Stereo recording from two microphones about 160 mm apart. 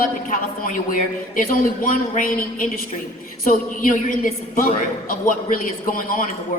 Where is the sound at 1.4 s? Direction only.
60° left (ahead or behind).